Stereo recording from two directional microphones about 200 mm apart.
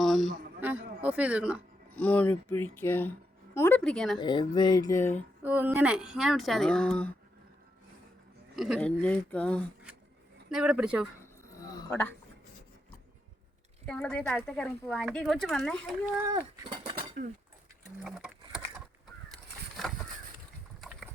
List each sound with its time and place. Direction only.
0.0 s a sound: centre (ahead or behind)
2.0 s speech: 5° left (ahead or behind)
4.2 s speech: 20° left (ahead or behind)
5.4 s speech: 10° right (ahead or behind)
8.5 s speech: centre (ahead or behind)
11.9 s speech: 10° left (ahead or behind)
13.8 s speech: 5° left (ahead or behind)
16.2 s speech: 15° right (ahead or behind)
17.2 s speech: 40° right (ahead or behind)
18.0 s a sound: centre (ahead or behind)